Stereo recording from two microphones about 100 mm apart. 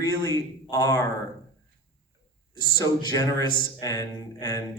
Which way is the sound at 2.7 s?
40° left (ahead or behind).